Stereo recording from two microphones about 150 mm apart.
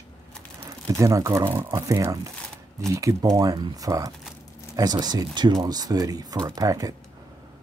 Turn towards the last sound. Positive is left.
turn(degrees=-25)  # may be behind; listen again after turning